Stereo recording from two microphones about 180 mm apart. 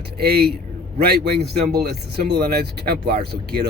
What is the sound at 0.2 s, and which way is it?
Speech, 60° right (ahead or behind).